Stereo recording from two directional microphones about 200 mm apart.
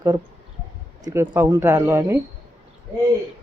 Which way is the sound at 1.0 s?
15° right (ahead or behind).